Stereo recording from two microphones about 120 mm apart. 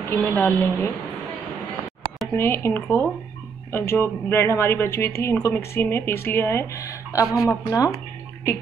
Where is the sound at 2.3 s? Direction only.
20° left (ahead or behind).